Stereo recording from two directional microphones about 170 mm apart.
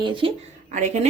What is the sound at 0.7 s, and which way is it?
Speech, 45° right (ahead or behind).